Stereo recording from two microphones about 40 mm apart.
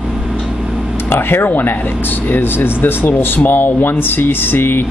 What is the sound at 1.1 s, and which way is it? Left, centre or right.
Speech, left.